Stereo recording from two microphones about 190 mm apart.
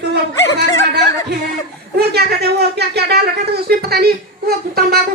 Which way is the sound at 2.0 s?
60° right (ahead or behind).